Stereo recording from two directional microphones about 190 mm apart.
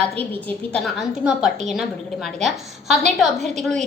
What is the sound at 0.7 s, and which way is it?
A woman's voice, centre (ahead or behind).